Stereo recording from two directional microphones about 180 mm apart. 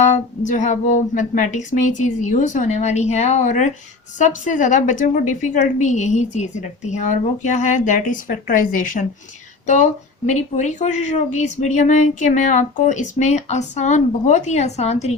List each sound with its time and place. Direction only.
0.0 s a woman's voice: 40° left (ahead or behind)